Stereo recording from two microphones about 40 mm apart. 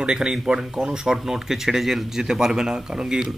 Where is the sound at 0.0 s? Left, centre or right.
Right.